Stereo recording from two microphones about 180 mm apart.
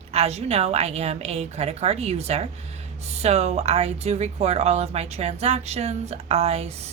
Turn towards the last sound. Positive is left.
turn(degrees=-35)  # may be behind; listen again after turning